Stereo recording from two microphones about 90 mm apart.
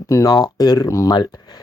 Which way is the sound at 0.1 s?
40° left (ahead or behind).